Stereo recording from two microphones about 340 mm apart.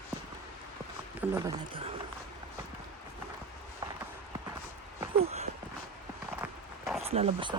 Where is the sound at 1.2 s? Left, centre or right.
Centre.